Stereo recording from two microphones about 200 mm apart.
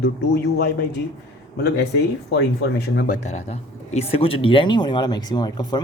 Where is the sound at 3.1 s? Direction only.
35° left (ahead or behind).